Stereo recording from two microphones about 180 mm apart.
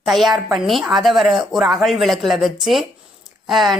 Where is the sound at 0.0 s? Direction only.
Centre (ahead or behind).